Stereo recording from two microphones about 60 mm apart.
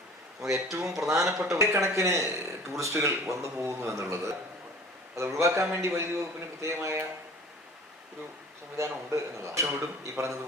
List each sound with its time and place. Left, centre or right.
0.4 s a man's voice: right
8.7 s a man's voice: right